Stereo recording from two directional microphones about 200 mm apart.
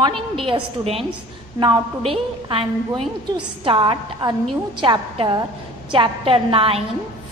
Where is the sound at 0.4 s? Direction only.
25° right (ahead or behind).